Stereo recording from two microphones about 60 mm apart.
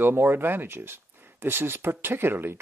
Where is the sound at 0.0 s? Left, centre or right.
Right.